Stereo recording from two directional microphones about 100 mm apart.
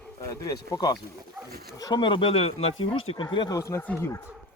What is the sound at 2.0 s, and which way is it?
Speech, 60° left (ahead or behind).